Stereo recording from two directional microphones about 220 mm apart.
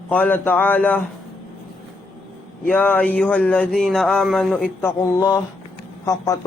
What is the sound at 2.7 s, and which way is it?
Speech, 5° left (ahead or behind).